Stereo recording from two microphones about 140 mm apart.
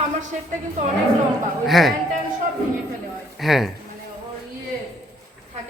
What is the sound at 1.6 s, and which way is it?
Speech, centre (ahead or behind).